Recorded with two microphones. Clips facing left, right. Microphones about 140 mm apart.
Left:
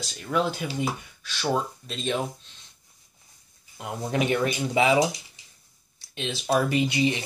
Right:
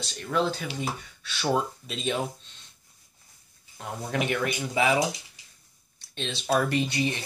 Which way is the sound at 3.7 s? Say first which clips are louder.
Left 3 dB; 15° left (ahead or behind).